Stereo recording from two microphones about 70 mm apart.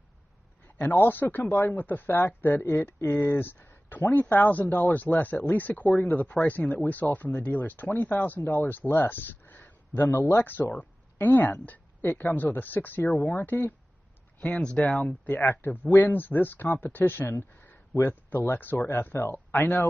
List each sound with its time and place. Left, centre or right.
0.7 s speech: left
10.0 s speech: left
14.4 s speech: centre
15.2 s speech: left